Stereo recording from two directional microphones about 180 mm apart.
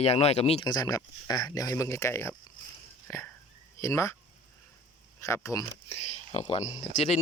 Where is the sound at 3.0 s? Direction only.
15° left (ahead or behind).